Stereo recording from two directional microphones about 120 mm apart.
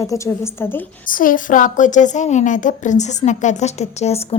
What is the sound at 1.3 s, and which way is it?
A woman's voice, 90° left.